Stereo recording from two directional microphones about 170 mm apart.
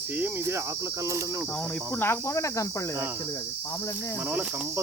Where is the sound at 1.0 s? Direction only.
20° right (ahead or behind).